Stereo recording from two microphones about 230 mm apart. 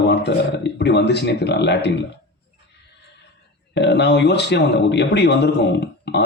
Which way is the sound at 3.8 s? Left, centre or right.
Left.